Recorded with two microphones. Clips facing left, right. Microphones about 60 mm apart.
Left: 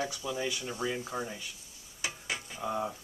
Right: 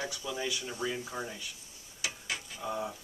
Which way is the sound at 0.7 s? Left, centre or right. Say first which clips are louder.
Left 1 dB; centre.